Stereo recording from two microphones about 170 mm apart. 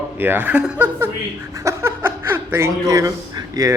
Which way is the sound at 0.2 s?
10° right (ahead or behind).